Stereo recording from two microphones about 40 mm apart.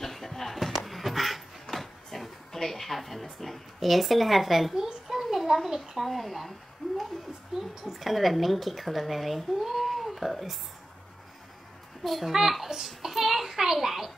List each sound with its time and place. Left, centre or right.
0.0 s a sound: centre
2.0 s speech: centre
4.7 s a sound: centre
5.9 s speech: centre
7.8 s a woman's voice: centre
12.0 s a child's voice: centre